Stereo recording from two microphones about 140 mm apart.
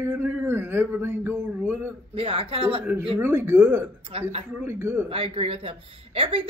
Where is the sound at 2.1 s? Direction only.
40° right (ahead or behind).